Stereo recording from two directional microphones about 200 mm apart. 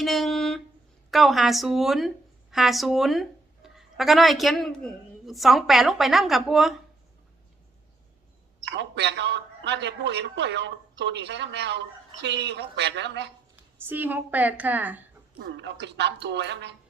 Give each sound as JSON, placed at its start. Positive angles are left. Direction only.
{"t": 0.0, "sound": "a sound", "side_deg": 0}
{"t": 1.1, "sound": "a woman's voice", "side_deg": 0}
{"t": 8.7, "sound": "a man's voice", "side_deg": -60}
{"t": 13.8, "sound": "a woman's voice", "side_deg": -10}
{"t": 15.4, "sound": "a man's voice", "side_deg": -55}